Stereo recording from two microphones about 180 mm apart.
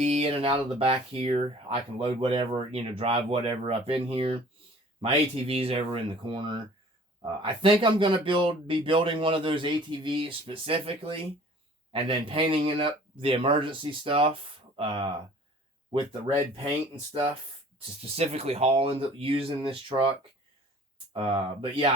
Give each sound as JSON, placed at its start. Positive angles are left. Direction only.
{"t": 0.0, "sound": "speech", "side_deg": -35}
{"t": 16.9, "sound": "speech", "side_deg": -35}